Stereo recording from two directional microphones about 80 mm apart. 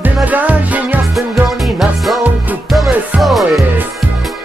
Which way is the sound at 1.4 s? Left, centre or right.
Centre.